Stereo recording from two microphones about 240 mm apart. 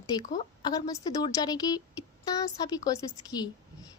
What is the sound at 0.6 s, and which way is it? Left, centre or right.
A woman's voice, centre.